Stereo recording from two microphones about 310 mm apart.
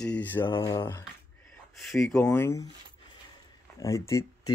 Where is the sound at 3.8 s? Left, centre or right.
Centre.